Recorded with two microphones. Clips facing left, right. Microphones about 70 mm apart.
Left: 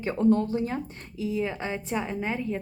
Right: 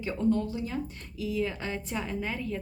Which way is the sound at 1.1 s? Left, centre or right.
Left.